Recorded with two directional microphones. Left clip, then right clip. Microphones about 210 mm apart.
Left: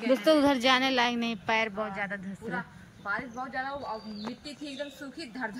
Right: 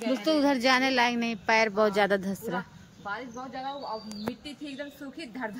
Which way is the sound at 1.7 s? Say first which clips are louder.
Right 10 dB; 30° right (ahead or behind).